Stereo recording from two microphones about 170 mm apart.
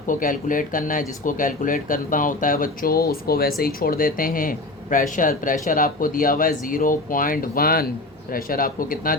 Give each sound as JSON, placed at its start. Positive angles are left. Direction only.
{"t": 0.1, "sound": "speech", "side_deg": 50}